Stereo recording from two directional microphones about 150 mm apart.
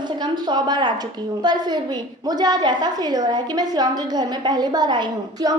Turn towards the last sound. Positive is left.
turn(degrees=-30)  # may be behind; listen again after turning